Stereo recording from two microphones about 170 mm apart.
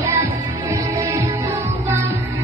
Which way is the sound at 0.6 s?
20° right (ahead or behind).